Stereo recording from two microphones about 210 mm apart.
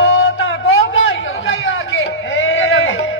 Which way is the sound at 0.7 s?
70° left (ahead or behind).